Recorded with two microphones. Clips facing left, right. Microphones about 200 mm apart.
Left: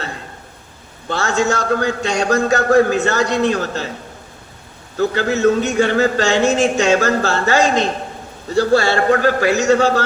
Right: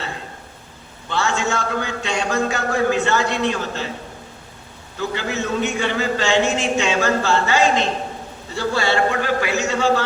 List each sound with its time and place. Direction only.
1.1 s a man's voice: 45° left (ahead or behind)
4.9 s a man's voice: 45° left (ahead or behind)